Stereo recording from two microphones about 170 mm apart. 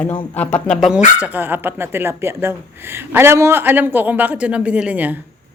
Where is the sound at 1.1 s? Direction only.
10° right (ahead or behind).